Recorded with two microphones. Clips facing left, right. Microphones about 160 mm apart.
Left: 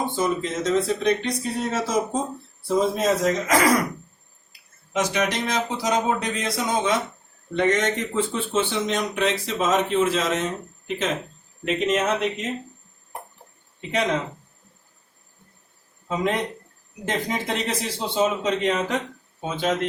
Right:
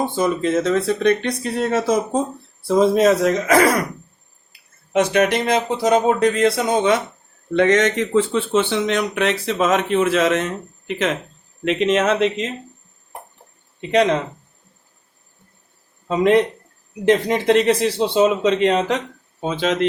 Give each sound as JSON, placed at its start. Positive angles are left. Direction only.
{"t": 0.2, "sound": "speech", "side_deg": -60}
{"t": 2.6, "sound": "speech", "side_deg": -80}
{"t": 4.9, "sound": "speech", "side_deg": -60}
{"t": 7.5, "sound": "speech", "side_deg": -90}
{"t": 11.6, "sound": "speech", "side_deg": -85}
{"t": 16.0, "sound": "speech", "side_deg": -70}
{"t": 19.4, "sound": "speech", "side_deg": -85}